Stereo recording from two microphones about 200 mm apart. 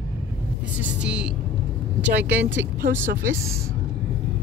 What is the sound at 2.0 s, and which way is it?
Speech, 10° right (ahead or behind).